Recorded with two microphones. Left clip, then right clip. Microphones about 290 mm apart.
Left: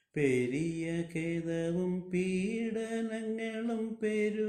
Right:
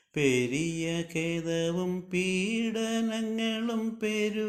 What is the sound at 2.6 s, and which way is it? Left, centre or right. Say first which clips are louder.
Mantra: right 5 dB; centre.